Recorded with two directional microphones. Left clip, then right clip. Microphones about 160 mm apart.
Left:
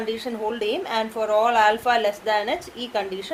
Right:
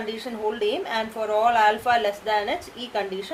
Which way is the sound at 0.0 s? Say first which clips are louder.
Left 1 dB; 45° left (ahead or behind).